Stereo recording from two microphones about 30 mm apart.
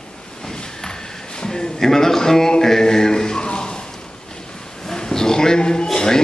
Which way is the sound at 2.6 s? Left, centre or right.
Centre.